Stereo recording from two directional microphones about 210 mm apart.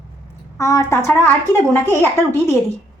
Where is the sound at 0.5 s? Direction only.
15° left (ahead or behind).